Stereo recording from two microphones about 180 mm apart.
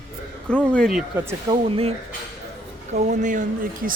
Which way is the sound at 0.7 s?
Centre (ahead or behind).